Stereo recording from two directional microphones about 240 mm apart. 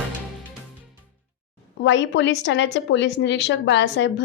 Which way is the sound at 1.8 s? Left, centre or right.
Left.